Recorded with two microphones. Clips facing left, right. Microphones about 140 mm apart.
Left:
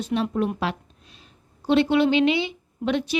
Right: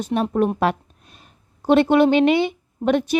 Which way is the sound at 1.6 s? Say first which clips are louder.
Right 4 dB; 50° right (ahead or behind).